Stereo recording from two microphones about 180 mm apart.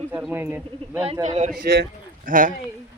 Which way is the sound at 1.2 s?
40° right (ahead or behind).